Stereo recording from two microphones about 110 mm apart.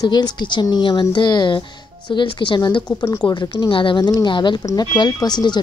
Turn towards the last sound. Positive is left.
turn(degrees=40)  # may be behind; listen again after turning